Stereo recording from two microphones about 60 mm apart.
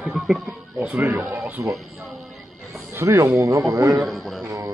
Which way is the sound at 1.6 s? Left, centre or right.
Right.